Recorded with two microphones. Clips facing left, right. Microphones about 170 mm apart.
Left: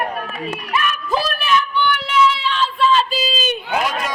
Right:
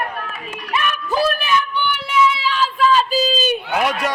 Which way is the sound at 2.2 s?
5° right (ahead or behind).